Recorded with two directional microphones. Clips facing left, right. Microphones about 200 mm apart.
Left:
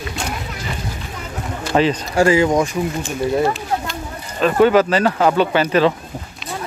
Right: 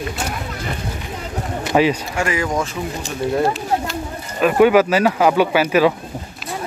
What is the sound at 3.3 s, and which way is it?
Speech, centre (ahead or behind).